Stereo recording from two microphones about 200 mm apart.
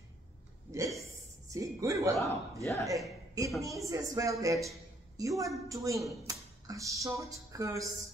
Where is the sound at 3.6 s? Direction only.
15° right (ahead or behind).